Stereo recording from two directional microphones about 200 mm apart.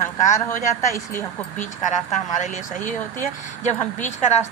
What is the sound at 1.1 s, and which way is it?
Speech, 40° left (ahead or behind).